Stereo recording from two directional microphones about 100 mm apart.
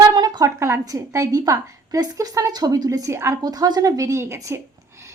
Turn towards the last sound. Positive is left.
turn(degrees=-30)  # may be behind; listen again after turning